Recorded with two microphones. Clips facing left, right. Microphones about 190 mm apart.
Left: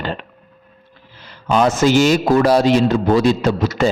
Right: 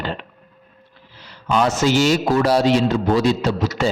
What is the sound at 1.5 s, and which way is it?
A man's voice, 50° left (ahead or behind).